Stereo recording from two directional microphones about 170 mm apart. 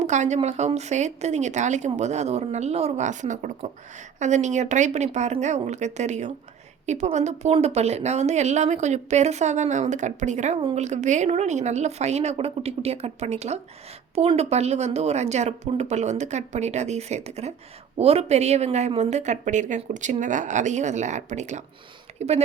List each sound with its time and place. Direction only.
0.0 s a woman's voice: 45° right (ahead or behind)